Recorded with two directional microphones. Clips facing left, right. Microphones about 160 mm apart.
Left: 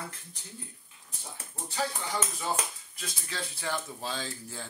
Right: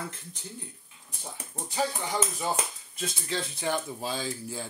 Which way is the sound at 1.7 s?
15° right (ahead or behind).